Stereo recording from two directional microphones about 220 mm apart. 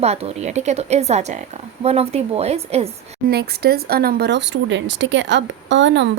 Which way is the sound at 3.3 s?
45° right (ahead or behind).